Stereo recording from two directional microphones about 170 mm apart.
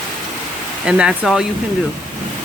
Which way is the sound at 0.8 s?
5° right (ahead or behind).